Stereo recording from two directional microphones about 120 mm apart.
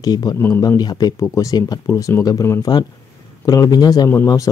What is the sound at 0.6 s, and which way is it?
Speech, 30° left (ahead or behind).